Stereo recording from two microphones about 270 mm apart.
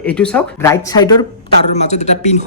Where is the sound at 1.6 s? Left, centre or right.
Left.